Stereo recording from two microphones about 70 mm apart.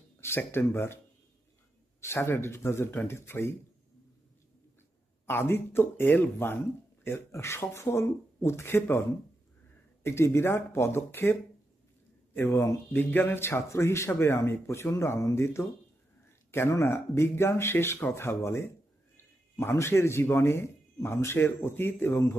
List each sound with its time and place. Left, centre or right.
0.2 s speech: left
2.0 s speech: left
5.2 s speech: left
10.0 s speech: left
12.4 s speech: left
12.9 s speech: left